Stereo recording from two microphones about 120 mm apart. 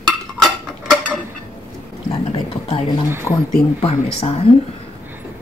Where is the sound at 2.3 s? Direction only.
50° left (ahead or behind).